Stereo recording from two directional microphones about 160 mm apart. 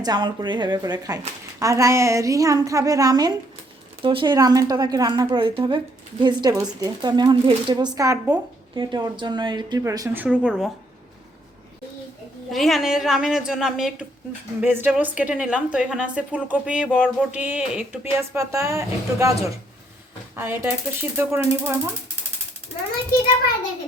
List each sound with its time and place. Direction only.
0.0 s a woman's voice: 25° right (ahead or behind)
10.2 s a woman's voice: 5° right (ahead or behind)
12.5 s a woman's voice: centre (ahead or behind)
18.3 s a woman's voice: 20° right (ahead or behind)